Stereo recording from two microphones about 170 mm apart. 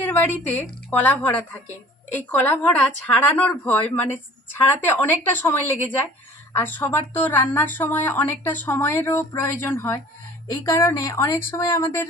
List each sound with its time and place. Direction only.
0.0 s a woman's voice: 10° left (ahead or behind)